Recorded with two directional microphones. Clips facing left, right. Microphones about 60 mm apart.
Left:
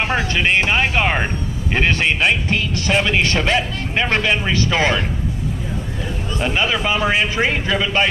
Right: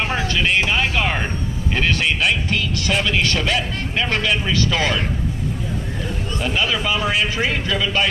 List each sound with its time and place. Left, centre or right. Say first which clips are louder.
0.1 s speech: left 2 dB; left
6.4 s speech: left 2 dB; left